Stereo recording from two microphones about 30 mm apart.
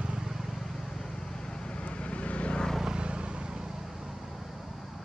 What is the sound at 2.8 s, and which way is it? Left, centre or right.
Vehicle, right.